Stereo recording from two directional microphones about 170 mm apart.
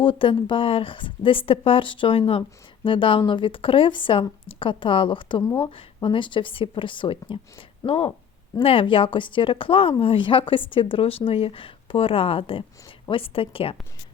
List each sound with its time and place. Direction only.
0.0 s speech: 30° left (ahead or behind)
5.4 s speech: 15° left (ahead or behind)
5.6 s speech: 30° left (ahead or behind)